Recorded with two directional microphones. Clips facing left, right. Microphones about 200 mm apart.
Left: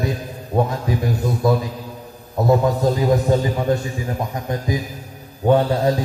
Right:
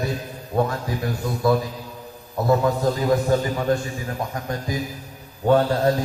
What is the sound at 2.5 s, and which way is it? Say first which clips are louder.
A man's voice: left 2 dB; 20° left (ahead or behind).